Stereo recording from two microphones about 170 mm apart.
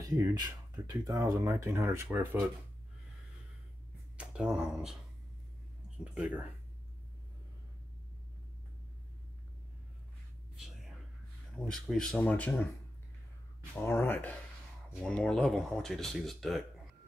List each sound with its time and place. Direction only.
0.0 s speech: 20° right (ahead or behind)
4.2 s speech: 5° right (ahead or behind)
6.1 s speech: 5° right (ahead or behind)
11.5 s speech: centre (ahead or behind)
13.8 s speech: 15° left (ahead or behind)